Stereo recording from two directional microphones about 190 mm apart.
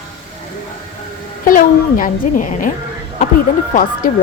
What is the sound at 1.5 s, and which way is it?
A woman's voice, 45° left (ahead or behind).